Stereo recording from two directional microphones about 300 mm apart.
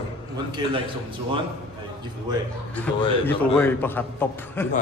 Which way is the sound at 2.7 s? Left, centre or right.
Centre.